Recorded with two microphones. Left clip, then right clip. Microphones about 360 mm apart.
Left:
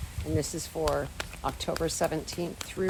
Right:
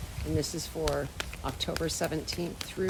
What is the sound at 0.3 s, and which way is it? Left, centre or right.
Speech, centre.